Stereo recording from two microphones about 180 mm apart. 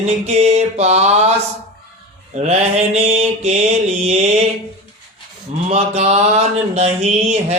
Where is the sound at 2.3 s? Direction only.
35° right (ahead or behind).